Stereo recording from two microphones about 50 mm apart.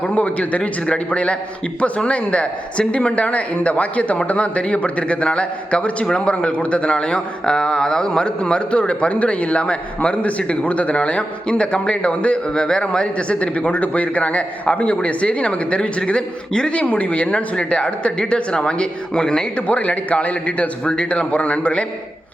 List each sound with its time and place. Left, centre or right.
0.0 s a man's voice: left